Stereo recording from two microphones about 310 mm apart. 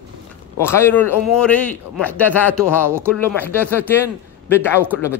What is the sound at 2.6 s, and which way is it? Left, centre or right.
Speech, centre.